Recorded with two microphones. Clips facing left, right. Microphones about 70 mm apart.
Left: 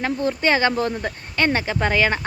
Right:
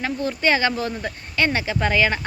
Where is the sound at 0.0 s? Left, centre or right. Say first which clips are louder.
Left 1 dB; left.